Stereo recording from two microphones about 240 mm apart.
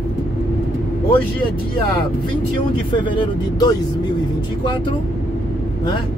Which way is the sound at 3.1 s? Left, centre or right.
Centre.